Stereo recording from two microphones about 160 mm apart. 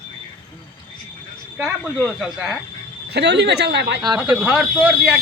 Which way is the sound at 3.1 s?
90° right.